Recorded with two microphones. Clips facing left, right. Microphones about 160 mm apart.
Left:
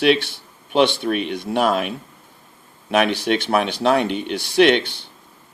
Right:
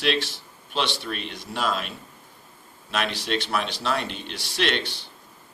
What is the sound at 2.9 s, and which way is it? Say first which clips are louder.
Speech: left 9 dB; 60° left (ahead or behind).